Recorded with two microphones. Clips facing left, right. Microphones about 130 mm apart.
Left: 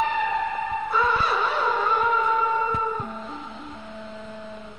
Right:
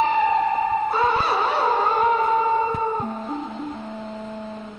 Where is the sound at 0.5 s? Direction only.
50° right (ahead or behind).